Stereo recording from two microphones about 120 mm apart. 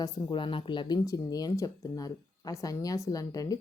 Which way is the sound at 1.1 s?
30° left (ahead or behind).